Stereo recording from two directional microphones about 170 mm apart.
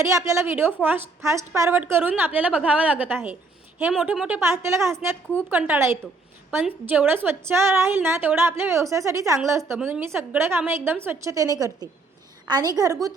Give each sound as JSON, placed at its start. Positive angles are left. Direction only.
{"t": 0.0, "sound": "a woman's voice", "side_deg": -15}